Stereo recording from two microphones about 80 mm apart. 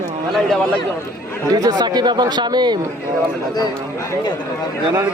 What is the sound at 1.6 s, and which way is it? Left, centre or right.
Speech, right.